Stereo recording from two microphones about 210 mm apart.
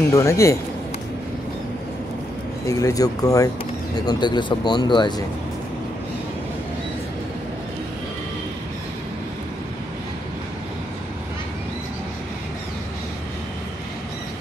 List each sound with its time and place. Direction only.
0.1 s speech: 15° left (ahead or behind)
2.7 s speech: 15° left (ahead or behind)